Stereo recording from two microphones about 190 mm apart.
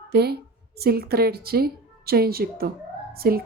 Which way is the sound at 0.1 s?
60° right (ahead or behind).